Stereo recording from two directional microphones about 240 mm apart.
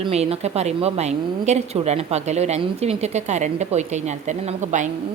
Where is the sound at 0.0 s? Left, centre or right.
Right.